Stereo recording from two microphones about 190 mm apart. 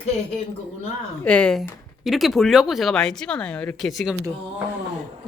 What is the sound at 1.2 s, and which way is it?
Speech, 5° left (ahead or behind).